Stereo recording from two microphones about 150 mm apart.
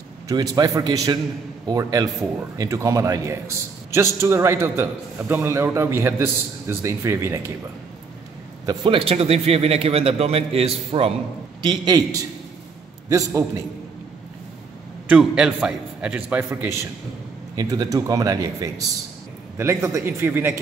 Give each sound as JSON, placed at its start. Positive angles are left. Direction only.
{"t": 0.3, "sound": "a man's voice", "side_deg": -25}
{"t": 8.6, "sound": "speech", "side_deg": -35}
{"t": 11.6, "sound": "speech", "side_deg": -30}
{"t": 15.0, "sound": "a man's voice", "side_deg": -5}
{"t": 17.6, "sound": "a man's voice", "side_deg": -25}